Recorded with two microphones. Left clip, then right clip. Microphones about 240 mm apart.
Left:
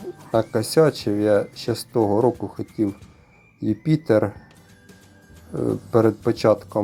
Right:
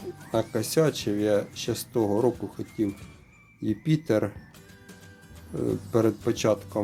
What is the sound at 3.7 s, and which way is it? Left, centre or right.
Speech, centre.